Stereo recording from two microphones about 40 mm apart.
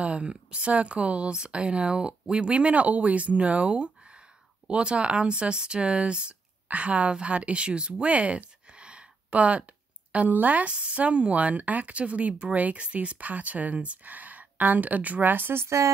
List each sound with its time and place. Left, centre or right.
0.0 s speech: right
7.9 s a sound: right
10.3 s speech: right